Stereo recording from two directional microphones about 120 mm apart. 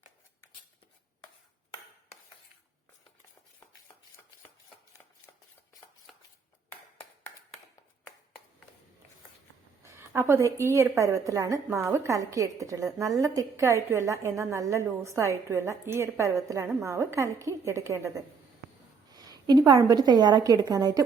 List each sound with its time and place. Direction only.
6.7 s a sound: 20° left (ahead or behind)
9.8 s a woman's voice: 20° right (ahead or behind)
19.1 s a woman's voice: 35° right (ahead or behind)